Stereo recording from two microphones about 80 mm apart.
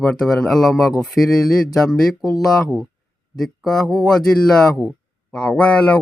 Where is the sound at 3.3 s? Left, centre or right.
Centre.